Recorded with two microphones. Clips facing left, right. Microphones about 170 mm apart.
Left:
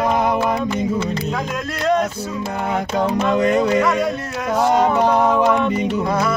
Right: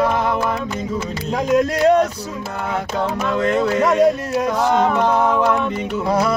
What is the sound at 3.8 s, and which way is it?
Speech, 35° right (ahead or behind).